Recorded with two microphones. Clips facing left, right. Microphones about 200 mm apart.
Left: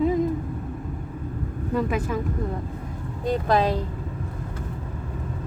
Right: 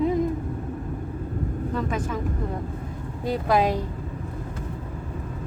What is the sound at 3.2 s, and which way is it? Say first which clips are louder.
Speech: even; 10° right (ahead or behind).